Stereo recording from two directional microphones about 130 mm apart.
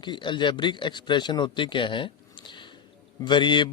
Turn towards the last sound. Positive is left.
turn(degrees=35)  # may be behind; listen again after turning